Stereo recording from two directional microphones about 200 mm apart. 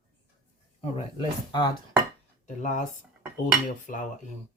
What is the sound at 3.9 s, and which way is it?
Speech, 45° left (ahead or behind).